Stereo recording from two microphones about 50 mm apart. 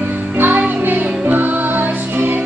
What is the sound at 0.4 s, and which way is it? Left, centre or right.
Music, right.